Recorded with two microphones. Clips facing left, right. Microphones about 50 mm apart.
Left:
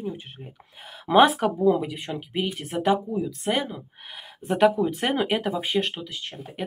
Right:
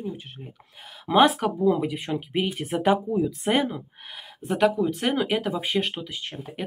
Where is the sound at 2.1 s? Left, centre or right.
Centre.